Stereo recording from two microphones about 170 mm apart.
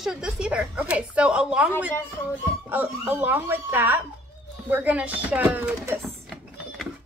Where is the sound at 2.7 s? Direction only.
10° right (ahead or behind).